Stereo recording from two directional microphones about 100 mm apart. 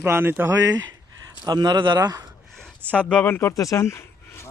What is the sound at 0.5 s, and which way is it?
Speech, 35° right (ahead or behind).